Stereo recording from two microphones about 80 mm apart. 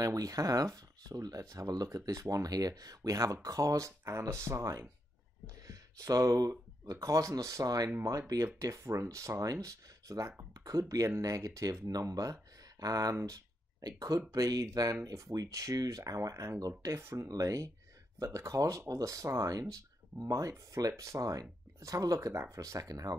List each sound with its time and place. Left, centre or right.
0.0 s speech: right
7.9 s speech: right
17.3 s speech: right